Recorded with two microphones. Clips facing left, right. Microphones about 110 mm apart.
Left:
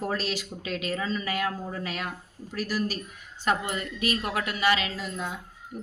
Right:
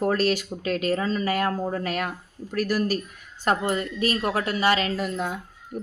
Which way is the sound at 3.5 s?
35° right (ahead or behind).